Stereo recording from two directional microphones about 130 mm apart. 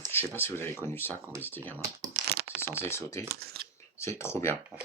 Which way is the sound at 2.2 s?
75° right (ahead or behind).